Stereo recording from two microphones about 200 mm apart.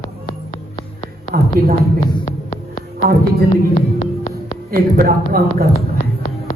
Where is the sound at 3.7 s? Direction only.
40° left (ahead or behind).